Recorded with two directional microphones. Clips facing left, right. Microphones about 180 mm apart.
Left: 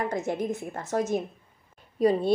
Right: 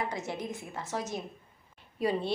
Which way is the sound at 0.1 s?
50° left (ahead or behind).